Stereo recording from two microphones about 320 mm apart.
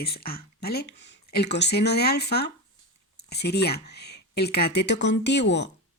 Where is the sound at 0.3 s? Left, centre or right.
Left.